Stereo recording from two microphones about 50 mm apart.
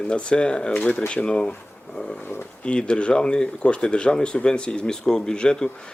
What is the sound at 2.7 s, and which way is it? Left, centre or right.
Speech, centre.